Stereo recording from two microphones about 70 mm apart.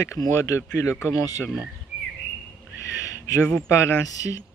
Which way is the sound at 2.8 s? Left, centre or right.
Left.